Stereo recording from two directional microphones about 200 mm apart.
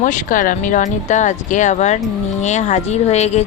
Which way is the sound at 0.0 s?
40° left (ahead or behind).